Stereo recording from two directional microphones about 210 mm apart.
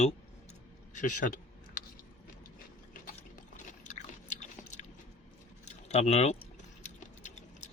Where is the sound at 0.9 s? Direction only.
35° left (ahead or behind).